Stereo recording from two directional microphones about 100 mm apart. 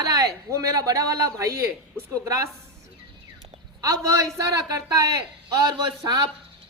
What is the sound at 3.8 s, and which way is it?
A woman's voice, 35° right (ahead or behind).